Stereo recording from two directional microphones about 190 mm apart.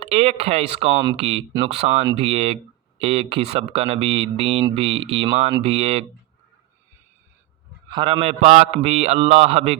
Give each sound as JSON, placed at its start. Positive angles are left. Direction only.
{"t": 0.0, "sound": "speech", "side_deg": -30}
{"t": 7.9, "sound": "speech", "side_deg": -25}